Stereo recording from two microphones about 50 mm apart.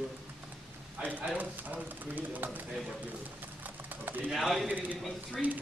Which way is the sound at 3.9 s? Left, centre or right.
Right.